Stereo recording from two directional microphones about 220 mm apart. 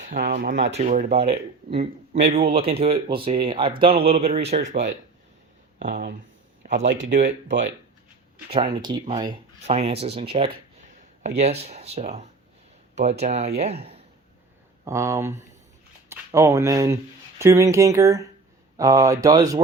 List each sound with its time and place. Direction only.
0.1 s speech: 40° right (ahead or behind)
6.6 s a sound: 35° right (ahead or behind)
7.0 s speech: 35° right (ahead or behind)
8.4 s speech: 25° right (ahead or behind)
14.8 s speech: 15° right (ahead or behind)